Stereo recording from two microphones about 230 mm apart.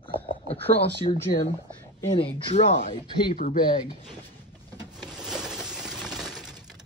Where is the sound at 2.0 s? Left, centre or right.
Left.